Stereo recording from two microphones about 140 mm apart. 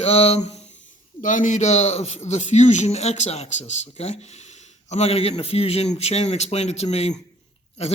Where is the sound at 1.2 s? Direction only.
70° left (ahead or behind).